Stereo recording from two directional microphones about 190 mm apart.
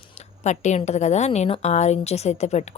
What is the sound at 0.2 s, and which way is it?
A woman's voice, 40° left (ahead or behind).